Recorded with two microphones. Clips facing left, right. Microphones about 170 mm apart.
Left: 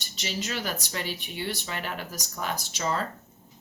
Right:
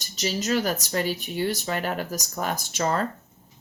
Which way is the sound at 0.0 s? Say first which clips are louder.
Right 6 dB; 40° right (ahead or behind).